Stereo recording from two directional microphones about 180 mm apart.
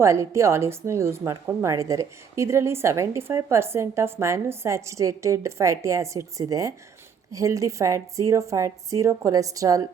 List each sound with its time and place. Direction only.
0.0 s speech: 15° right (ahead or behind)